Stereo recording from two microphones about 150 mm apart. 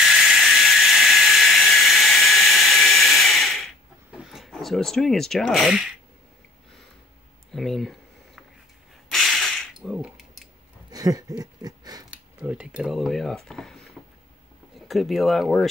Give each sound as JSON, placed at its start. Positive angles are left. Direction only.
{"t": 0.0, "sound": "a sound", "side_deg": -5}
{"t": 7.5, "sound": "speech", "side_deg": 0}
{"t": 9.1, "sound": "tools", "side_deg": 0}
{"t": 10.9, "sound": "a sound", "side_deg": -25}
{"t": 12.1, "sound": "speech", "side_deg": -10}
{"t": 14.0, "sound": "vehicle", "side_deg": -5}
{"t": 14.9, "sound": "speech", "side_deg": 0}